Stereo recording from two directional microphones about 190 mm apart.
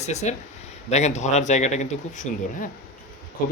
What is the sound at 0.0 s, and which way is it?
Speech, 35° left (ahead or behind).